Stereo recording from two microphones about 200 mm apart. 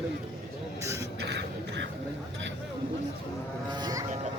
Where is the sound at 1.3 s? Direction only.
60° right (ahead or behind).